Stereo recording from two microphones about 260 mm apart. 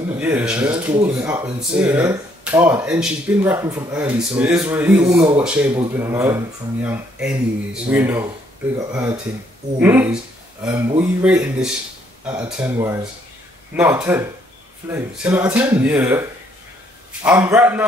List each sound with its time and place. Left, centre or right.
0.2 s speech: centre